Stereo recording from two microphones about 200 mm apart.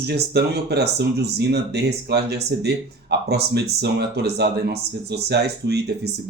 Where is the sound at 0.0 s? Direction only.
55° right (ahead or behind).